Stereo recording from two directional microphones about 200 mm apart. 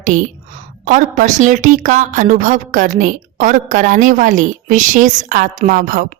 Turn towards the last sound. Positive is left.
turn(degrees=-45)  # may be behind; listen again after turning